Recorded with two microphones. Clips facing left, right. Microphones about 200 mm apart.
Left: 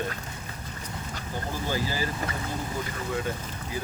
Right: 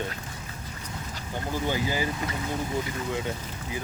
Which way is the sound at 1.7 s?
20° right (ahead or behind).